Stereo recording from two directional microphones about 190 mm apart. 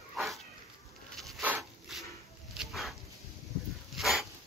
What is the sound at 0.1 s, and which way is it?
Dog, centre (ahead or behind).